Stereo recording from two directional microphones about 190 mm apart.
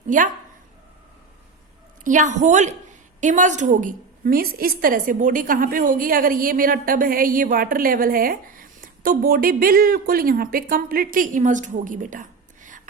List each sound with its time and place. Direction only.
0.1 s a woman's voice: 40° right (ahead or behind)
2.0 s a woman's voice: 40° right (ahead or behind)